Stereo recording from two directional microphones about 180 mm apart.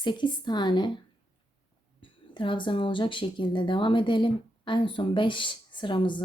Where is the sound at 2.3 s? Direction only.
25° left (ahead or behind).